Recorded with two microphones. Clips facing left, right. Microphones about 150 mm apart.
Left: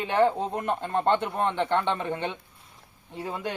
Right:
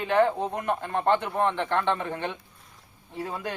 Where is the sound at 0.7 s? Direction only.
25° left (ahead or behind).